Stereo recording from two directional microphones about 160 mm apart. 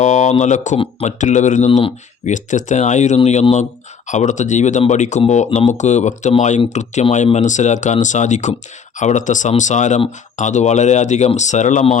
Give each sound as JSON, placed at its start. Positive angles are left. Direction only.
{"t": 0.0, "sound": "speech", "side_deg": 45}